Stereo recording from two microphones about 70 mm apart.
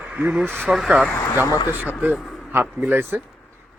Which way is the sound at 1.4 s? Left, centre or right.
Left.